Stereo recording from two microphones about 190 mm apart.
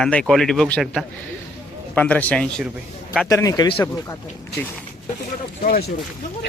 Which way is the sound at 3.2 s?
20° left (ahead or behind).